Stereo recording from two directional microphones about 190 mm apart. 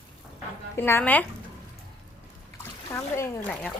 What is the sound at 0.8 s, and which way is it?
Speech, 10° left (ahead or behind).